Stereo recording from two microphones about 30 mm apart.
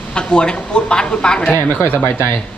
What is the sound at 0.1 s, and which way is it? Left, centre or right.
Speech, left.